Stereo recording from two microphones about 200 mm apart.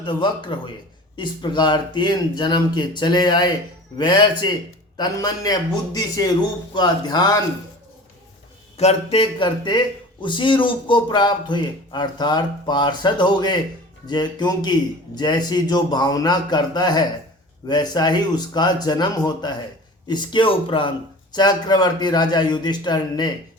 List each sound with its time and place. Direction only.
0.0 s speech: 25° left (ahead or behind)
8.8 s speech: 30° left (ahead or behind)